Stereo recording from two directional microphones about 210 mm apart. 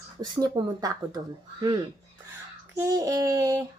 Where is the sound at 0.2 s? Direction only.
20° right (ahead or behind).